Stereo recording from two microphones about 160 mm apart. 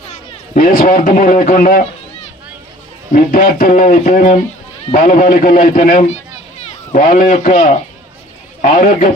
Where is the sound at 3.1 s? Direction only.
60° left (ahead or behind).